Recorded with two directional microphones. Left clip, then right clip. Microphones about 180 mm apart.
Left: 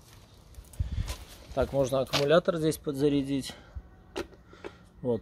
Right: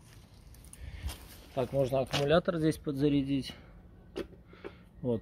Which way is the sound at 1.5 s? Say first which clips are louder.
Left 3 dB; 20° left (ahead or behind).